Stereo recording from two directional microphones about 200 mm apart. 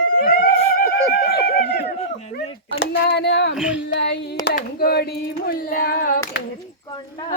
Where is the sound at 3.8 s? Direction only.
60° left (ahead or behind).